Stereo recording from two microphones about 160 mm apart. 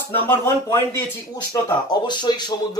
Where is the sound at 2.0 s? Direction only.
30° left (ahead or behind).